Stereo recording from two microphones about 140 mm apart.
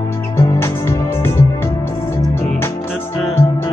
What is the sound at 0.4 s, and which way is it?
Music, 20° left (ahead or behind).